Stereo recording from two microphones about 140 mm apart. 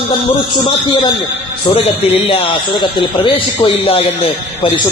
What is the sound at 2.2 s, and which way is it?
Speech, 40° left (ahead or behind).